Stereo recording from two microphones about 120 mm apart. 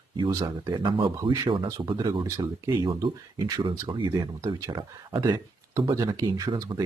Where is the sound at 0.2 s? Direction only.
35° right (ahead or behind).